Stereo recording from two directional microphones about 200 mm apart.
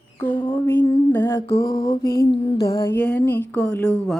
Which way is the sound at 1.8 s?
20° left (ahead or behind).